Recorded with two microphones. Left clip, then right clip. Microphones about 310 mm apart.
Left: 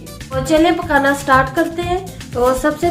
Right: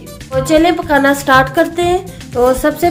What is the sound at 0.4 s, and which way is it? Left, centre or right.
Speech, centre.